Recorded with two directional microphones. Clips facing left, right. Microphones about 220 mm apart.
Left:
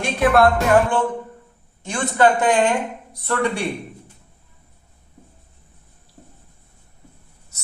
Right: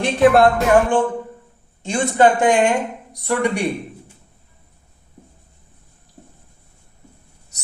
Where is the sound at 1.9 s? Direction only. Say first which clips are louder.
Right 2 dB; 15° right (ahead or behind).